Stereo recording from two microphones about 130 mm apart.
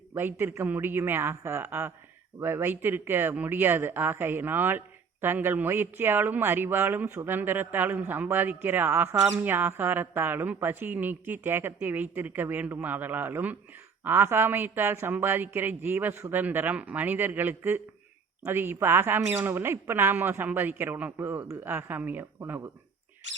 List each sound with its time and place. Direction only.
0.1 s speech: 15° right (ahead or behind)